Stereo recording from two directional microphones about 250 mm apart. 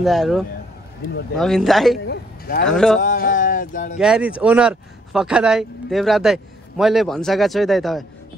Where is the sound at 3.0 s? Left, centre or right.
Left.